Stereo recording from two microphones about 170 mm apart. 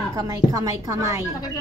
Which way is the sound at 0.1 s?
20° right (ahead or behind).